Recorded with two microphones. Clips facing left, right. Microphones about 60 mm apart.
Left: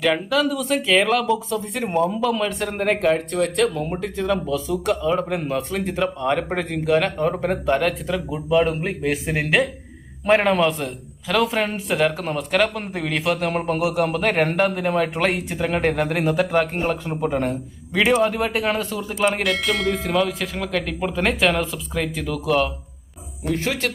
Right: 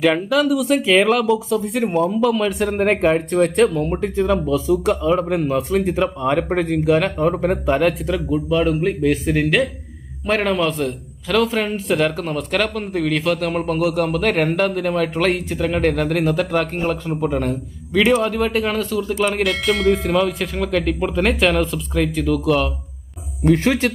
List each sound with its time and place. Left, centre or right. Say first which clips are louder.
0.0 s speech: right 3 dB; centre
3.8 s a man's voice: right 5 dB; centre
23.6 s speech: right 6 dB; centre